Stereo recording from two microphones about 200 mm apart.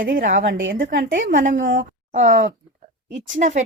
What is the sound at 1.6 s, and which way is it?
Speech, 70° right (ahead or behind).